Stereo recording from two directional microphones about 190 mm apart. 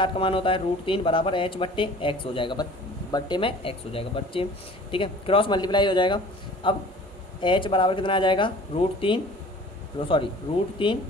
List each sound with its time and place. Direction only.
0.0 s speech: 25° left (ahead or behind)